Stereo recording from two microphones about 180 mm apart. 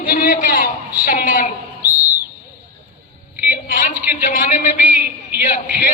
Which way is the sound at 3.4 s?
50° left (ahead or behind).